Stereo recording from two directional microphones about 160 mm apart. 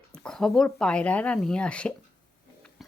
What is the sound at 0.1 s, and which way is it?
Speech, 5° left (ahead or behind).